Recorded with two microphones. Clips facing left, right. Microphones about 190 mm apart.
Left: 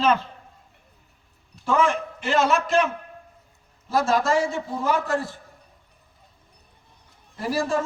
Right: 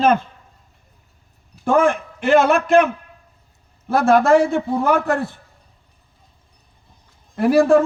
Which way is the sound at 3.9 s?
60° right (ahead or behind).